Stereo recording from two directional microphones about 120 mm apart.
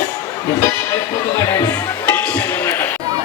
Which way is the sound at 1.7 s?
20° left (ahead or behind).